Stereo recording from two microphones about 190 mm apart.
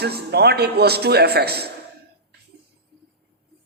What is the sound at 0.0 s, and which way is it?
A man's voice, 60° right (ahead or behind).